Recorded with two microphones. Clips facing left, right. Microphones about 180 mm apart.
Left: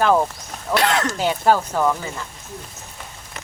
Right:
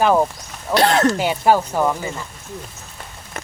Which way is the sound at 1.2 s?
10° right (ahead or behind).